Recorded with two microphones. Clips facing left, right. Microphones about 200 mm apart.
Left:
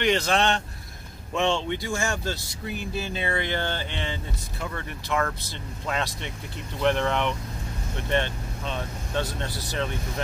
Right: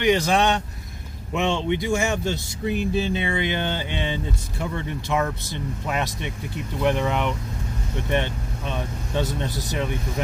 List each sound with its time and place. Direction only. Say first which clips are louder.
0.0 s speech: right 3 dB; 15° right (ahead or behind)